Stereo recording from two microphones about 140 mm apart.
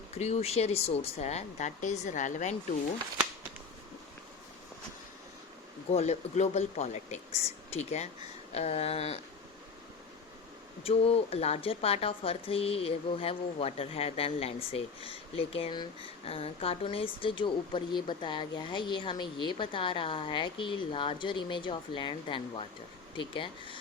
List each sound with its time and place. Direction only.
0.1 s speech: 50° left (ahead or behind)
5.9 s speech: 50° left (ahead or behind)
10.8 s a woman's voice: 45° left (ahead or behind)